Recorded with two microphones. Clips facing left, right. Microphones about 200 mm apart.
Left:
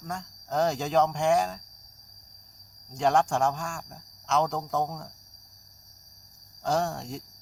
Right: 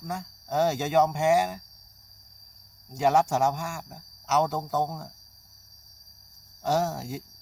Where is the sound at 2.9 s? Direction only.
5° right (ahead or behind).